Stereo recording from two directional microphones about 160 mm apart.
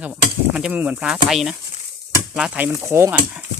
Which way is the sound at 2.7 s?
15° right (ahead or behind).